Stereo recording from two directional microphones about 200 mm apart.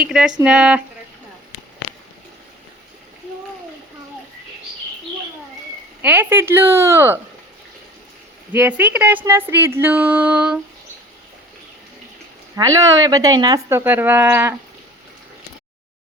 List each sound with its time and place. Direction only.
0.0 s speech: 5° right (ahead or behind)
6.0 s speech: 10° right (ahead or behind)
8.5 s speech: 10° right (ahead or behind)
12.5 s speech: 15° right (ahead or behind)